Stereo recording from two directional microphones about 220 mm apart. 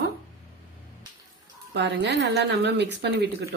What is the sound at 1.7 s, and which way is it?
A woman's voice, 55° right (ahead or behind).